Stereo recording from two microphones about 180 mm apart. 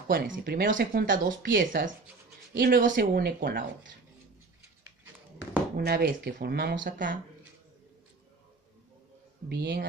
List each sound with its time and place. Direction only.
0.1 s speech: 55° right (ahead or behind)
3.0 s speech: 60° right (ahead or behind)
5.8 s speech: 60° right (ahead or behind)
9.5 s speech: 65° right (ahead or behind)